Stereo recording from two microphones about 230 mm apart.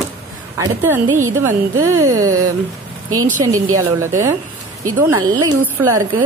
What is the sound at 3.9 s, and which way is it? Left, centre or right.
Speech, centre.